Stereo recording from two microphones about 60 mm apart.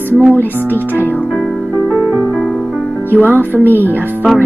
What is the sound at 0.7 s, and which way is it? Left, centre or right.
Speech, left.